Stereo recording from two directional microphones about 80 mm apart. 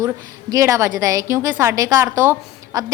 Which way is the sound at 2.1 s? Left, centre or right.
Right.